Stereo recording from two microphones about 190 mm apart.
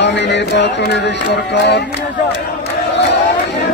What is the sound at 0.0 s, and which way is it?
Music, 65° left (ahead or behind).